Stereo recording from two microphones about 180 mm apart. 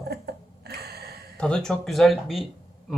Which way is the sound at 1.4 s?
5° left (ahead or behind).